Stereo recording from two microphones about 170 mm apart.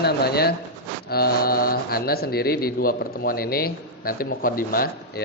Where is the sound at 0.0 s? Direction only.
70° left (ahead or behind).